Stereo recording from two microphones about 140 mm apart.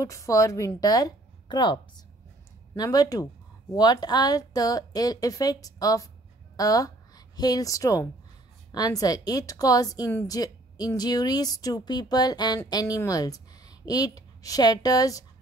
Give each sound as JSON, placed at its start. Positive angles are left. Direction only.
{"t": 0.0, "sound": "a woman's voice", "side_deg": 25}